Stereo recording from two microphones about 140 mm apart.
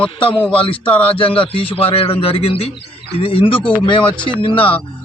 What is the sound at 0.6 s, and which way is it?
A man's voice, 40° left (ahead or behind).